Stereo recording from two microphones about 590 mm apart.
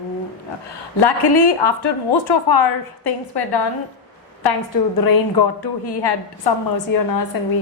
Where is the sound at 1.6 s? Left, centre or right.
Left.